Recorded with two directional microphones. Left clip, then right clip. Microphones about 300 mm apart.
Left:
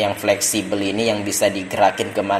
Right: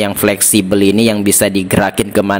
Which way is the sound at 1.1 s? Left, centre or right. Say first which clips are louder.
Right 5 dB; right.